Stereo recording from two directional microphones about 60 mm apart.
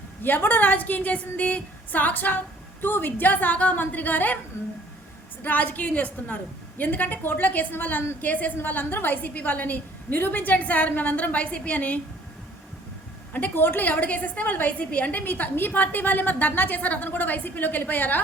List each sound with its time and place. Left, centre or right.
0.2 s a woman's voice: left
5.4 s a woman's voice: left
13.3 s a woman's voice: left